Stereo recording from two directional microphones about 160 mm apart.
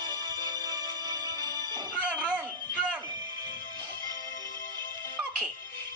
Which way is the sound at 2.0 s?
5° right (ahead or behind).